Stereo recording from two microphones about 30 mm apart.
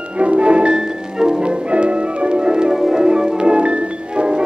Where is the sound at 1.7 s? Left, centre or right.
Right.